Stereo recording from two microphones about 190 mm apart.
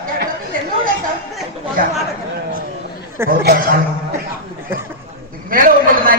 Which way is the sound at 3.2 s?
50° right (ahead or behind).